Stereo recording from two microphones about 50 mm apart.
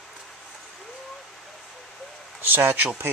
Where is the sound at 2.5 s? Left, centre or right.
Right.